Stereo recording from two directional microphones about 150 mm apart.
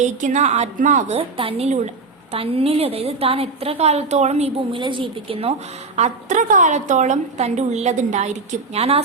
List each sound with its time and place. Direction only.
0.0 s a woman's voice: 55° right (ahead or behind)
1.4 s a woman's voice: 40° right (ahead or behind)
6.0 s a woman's voice: 55° right (ahead or behind)